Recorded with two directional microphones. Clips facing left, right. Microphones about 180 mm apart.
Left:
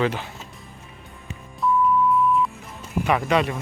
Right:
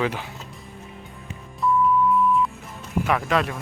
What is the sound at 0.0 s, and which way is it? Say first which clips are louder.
Speech: left 2 dB; 5° right (ahead or behind).